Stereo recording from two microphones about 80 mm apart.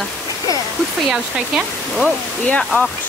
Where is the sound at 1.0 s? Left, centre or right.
Centre.